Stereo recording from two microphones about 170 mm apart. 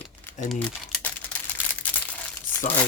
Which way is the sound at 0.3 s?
10° left (ahead or behind).